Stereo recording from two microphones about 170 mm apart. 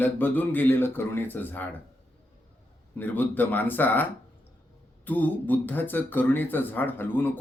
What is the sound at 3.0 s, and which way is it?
Speech, 10° left (ahead or behind).